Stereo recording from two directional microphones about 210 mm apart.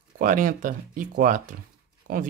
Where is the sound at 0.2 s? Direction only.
40° right (ahead or behind).